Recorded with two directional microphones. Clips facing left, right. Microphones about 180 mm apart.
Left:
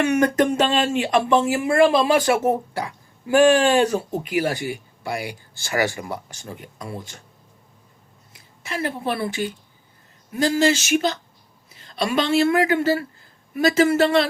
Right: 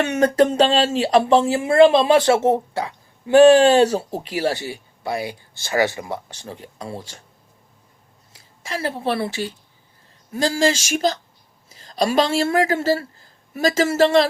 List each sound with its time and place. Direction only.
0.1 s speech: 30° right (ahead or behind)
8.3 s a woman's voice: 35° right (ahead or behind)